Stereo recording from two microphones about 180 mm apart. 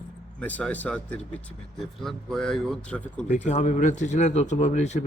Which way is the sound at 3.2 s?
40° left (ahead or behind).